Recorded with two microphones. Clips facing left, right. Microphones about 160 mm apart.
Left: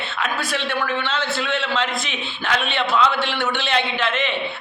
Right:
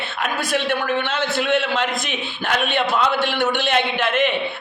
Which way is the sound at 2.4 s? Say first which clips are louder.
Right 2 dB; 50° right (ahead or behind).